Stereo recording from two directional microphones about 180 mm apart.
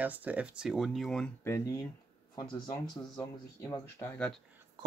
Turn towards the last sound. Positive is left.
turn(degrees=10)  # may be behind; listen again after turning